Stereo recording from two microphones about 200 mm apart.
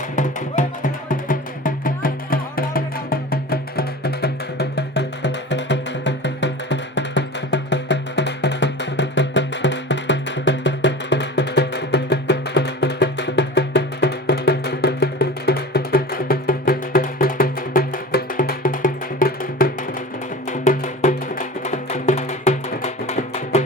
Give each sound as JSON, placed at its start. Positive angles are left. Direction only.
{"t": 0.2, "sound": "music", "side_deg": 40}